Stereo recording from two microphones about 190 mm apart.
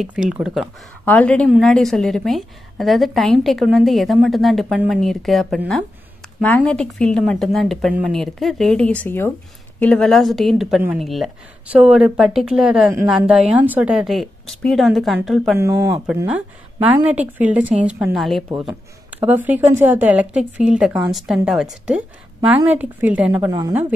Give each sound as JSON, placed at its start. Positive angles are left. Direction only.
{"t": 0.0, "sound": "a woman's voice", "side_deg": -5}
{"t": 1.0, "sound": "a woman's voice", "side_deg": 5}
{"t": 15.5, "sound": "a woman's voice", "side_deg": -15}